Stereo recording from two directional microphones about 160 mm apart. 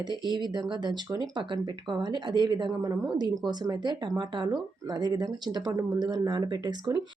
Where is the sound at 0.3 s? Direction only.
30° right (ahead or behind).